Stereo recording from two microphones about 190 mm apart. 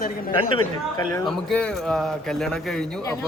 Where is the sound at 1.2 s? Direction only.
5° left (ahead or behind).